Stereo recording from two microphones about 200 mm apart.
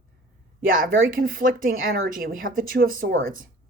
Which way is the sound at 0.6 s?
45° right (ahead or behind).